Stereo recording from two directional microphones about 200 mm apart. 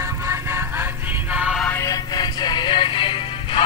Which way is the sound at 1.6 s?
15° left (ahead or behind).